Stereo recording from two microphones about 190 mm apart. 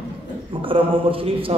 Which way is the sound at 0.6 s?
30° right (ahead or behind).